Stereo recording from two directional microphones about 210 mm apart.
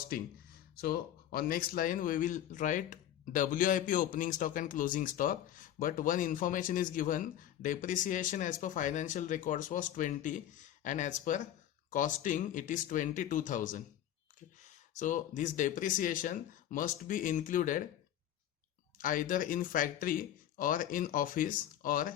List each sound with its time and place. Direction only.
0.1 s speech: 45° left (ahead or behind)
18.9 s speech: 40° left (ahead or behind)